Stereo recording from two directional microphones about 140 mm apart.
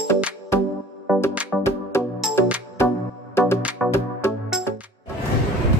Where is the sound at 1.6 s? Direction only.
20° left (ahead or behind).